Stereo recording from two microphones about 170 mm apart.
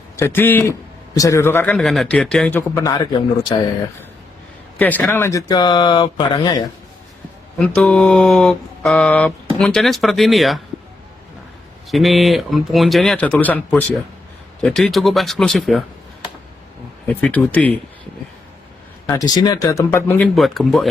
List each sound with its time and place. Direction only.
0.2 s a man's voice: 15° left (ahead or behind)
1.7 s mantra: centre (ahead or behind); by 3.1 s 20° left (ahead or behind)
3.5 s speech: 30° left (ahead or behind)
4.8 s speech: 10° left (ahead or behind); by 6.7 s 25° left (ahead or behind)
7.6 s mantra: 5° left (ahead or behind)
11.9 s mantra: centre (ahead or behind)
17.1 s speech: 5° left (ahead or behind)
19.3 s speech: 20° left (ahead or behind); by 20.8 s centre (ahead or behind)